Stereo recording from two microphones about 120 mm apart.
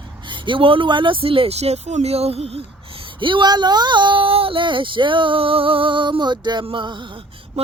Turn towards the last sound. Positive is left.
turn(degrees=-40)  # may be behind; listen again after turning